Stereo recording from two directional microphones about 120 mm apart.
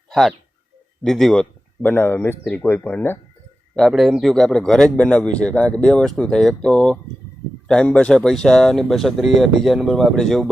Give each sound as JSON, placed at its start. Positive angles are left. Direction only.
{"t": 0.1, "sound": "a man's voice", "side_deg": 0}
{"t": 1.8, "sound": "speech", "side_deg": 15}
{"t": 3.8, "sound": "a man's voice", "side_deg": 0}